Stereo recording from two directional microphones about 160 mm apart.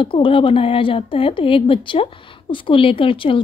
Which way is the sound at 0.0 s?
35° left (ahead or behind).